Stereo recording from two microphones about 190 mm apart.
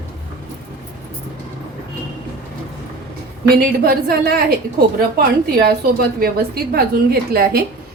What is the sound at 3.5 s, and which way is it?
A woman's voice, 55° right (ahead or behind).